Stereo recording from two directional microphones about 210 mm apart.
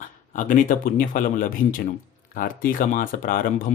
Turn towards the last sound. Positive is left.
turn(degrees=40)  # may be behind; listen again after turning